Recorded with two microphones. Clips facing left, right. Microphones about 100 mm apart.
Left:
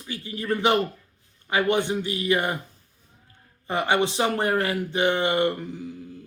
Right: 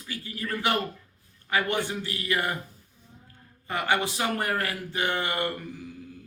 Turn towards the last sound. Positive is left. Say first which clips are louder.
# left 6 dB
turn(degrees=20)  # may be behind; listen again after turning